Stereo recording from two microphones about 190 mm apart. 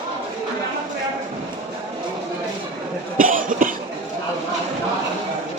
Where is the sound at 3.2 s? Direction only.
45° right (ahead or behind).